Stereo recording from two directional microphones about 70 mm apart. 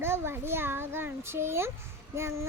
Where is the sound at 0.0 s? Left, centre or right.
Right.